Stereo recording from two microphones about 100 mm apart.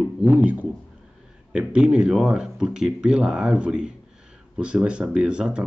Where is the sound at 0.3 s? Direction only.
15° right (ahead or behind).